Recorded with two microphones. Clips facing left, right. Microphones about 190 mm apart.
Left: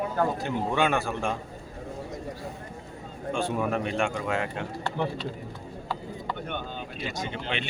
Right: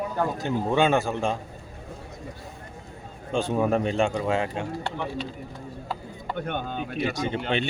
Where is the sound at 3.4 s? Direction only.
25° right (ahead or behind).